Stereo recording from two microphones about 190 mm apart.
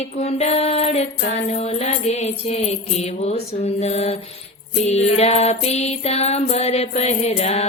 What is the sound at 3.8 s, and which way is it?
Music, 35° left (ahead or behind).